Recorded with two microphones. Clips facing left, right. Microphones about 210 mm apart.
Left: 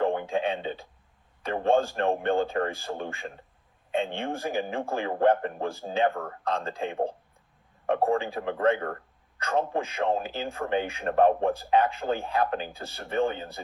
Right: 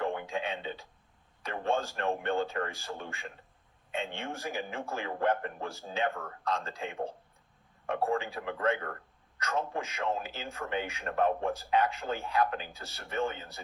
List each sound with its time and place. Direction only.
0.0 s speech: 35° left (ahead or behind)